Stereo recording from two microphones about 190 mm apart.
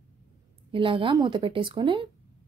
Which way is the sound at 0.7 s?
25° right (ahead or behind).